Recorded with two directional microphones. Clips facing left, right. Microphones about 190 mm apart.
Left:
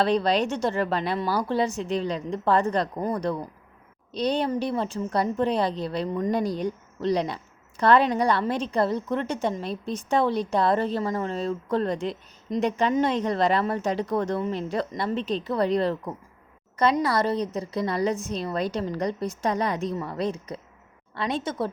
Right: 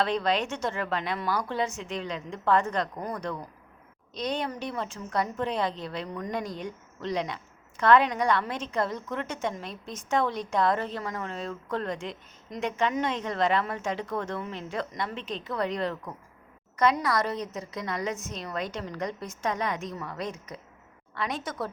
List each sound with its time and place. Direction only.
0.0 s a woman's voice: 35° left (ahead or behind)